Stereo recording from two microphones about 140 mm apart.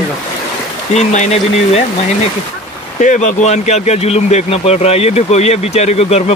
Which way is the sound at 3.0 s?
60° left (ahead or behind).